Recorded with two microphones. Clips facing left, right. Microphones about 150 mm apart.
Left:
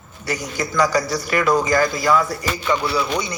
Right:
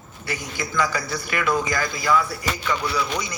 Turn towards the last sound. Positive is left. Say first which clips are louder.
# left 4 dB
turn(degrees=30)  # may be behind; listen again after turning